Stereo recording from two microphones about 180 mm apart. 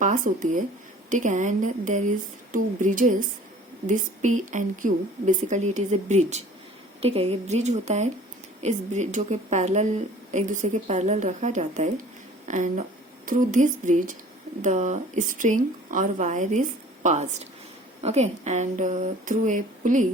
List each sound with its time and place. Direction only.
0.0 s a woman's voice: 45° right (ahead or behind)